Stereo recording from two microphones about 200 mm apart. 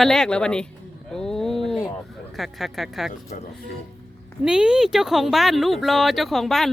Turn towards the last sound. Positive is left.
turn(degrees=0)  # may be behind; listen again after turning